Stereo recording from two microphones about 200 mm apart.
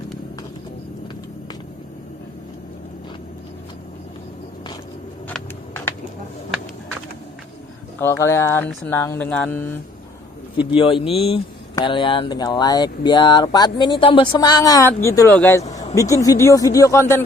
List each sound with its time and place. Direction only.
5.3 s a sound: 10° left (ahead or behind)
8.0 s speech: 15° left (ahead or behind)
10.8 s speech: 25° left (ahead or behind)